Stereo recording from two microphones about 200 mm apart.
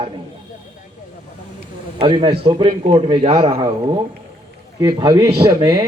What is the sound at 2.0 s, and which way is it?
A man's voice, 25° right (ahead or behind).